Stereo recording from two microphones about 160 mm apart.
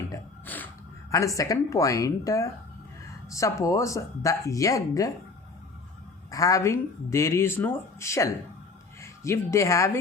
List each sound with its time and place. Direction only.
0.4 s gasp: 10° left (ahead or behind)
1.1 s speech: 20° left (ahead or behind)
6.3 s speech: 20° left (ahead or behind)